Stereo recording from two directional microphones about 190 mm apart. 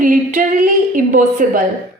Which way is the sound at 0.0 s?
40° right (ahead or behind).